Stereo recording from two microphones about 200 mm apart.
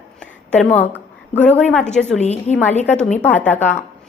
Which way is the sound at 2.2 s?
35° left (ahead or behind).